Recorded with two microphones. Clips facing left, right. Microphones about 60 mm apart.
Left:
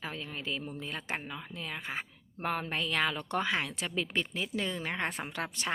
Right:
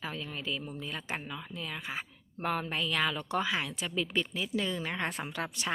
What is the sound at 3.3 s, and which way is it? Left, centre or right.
Speech, left.